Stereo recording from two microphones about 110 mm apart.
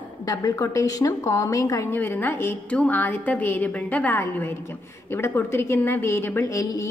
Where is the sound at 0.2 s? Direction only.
35° left (ahead or behind).